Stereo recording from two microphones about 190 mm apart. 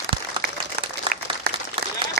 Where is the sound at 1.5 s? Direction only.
55° right (ahead or behind).